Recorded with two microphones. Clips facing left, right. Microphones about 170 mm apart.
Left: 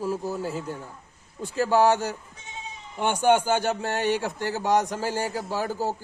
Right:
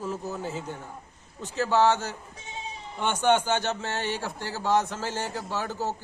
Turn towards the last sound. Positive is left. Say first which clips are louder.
# left 3 dB
turn(degrees=10)  # may be behind; listen again after turning